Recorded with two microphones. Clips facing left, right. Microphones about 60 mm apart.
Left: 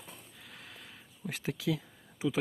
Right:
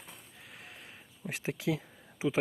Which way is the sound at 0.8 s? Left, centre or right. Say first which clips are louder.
Even; right.